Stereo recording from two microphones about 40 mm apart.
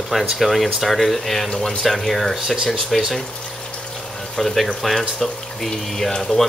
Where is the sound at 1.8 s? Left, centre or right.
Centre.